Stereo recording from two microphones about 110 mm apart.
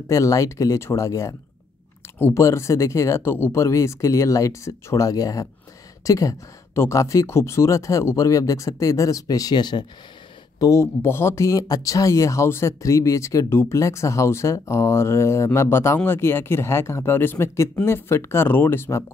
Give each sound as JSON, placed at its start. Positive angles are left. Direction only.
{"t": 0.1, "sound": "speech", "side_deg": 30}
{"t": 10.6, "sound": "speech", "side_deg": 25}